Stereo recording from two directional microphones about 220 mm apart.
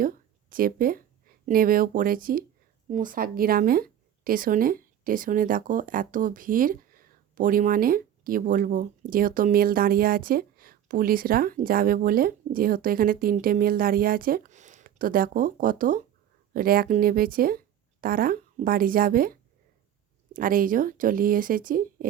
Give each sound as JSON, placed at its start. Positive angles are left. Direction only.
{"t": 0.0, "sound": "a woman's voice", "side_deg": -40}